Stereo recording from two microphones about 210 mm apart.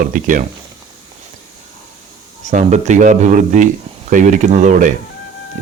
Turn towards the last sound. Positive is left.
turn(degrees=-35)  # may be behind; listen again after turning